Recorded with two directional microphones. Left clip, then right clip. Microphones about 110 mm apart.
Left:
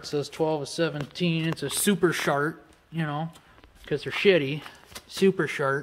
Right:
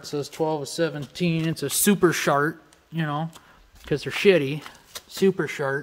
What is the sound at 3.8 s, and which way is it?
Speech, 90° right.